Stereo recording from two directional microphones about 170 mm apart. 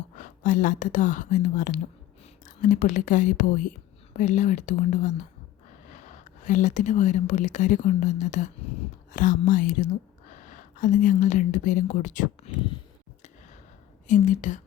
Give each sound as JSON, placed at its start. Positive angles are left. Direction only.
{"t": 0.2, "sound": "speech", "side_deg": 50}
{"t": 14.1, "sound": "speech", "side_deg": 45}